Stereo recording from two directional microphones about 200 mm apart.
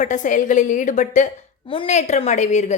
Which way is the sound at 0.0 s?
40° left (ahead or behind).